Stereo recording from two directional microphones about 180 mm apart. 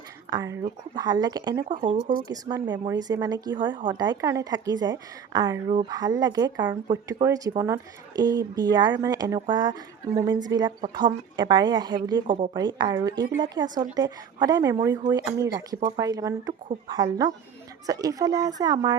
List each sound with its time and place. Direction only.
0.3 s speech: 20° right (ahead or behind)